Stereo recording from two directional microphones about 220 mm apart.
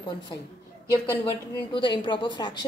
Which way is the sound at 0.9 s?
15° left (ahead or behind).